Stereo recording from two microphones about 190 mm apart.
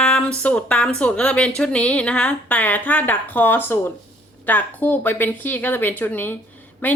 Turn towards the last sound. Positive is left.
turn(degrees=10)  # may be behind; listen again after turning